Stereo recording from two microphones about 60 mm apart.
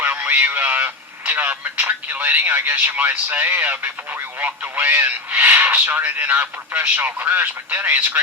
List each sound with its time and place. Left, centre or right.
0.1 s speech: right